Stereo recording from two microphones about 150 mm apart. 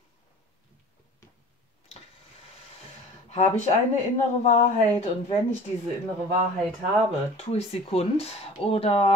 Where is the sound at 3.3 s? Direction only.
50° left (ahead or behind).